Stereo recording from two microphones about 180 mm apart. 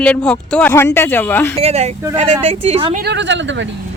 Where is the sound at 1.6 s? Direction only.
35° right (ahead or behind).